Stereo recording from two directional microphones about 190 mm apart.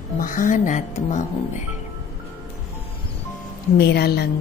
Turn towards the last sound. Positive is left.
turn(degrees=60)  # may be behind; listen again after turning